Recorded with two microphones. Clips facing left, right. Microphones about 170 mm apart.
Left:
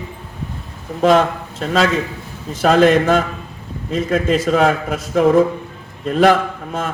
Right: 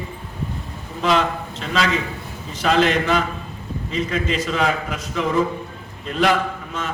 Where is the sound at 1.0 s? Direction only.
50° left (ahead or behind).